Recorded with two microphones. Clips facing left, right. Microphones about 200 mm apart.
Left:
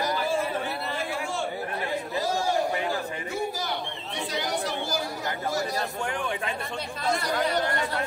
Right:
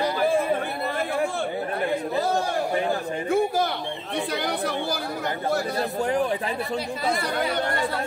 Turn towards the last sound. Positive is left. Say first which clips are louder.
# right 1 dB
turn(degrees=-60)  # may be behind; listen again after turning